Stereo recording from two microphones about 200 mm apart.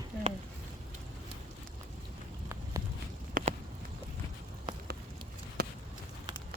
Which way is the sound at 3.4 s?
45° right (ahead or behind).